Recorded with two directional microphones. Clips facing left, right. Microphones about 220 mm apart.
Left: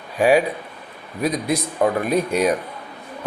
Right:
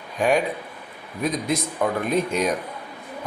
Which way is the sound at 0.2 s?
5° left (ahead or behind).